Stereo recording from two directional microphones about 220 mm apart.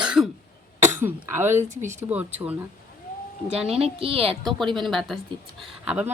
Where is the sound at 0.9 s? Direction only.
10° right (ahead or behind).